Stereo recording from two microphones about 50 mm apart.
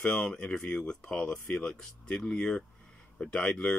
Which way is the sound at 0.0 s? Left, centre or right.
Centre.